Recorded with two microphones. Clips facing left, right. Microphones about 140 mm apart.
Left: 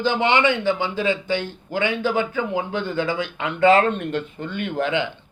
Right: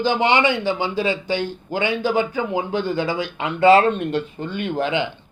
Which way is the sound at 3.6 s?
30° right (ahead or behind).